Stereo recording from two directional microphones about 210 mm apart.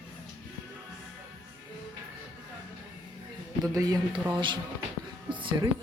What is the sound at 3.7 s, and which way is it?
Speech, 15° right (ahead or behind).